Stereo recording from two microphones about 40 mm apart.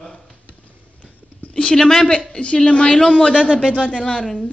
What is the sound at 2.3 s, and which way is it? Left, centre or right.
A woman's voice, left.